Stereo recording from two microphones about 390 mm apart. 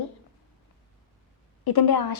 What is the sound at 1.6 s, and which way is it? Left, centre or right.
Speech, left.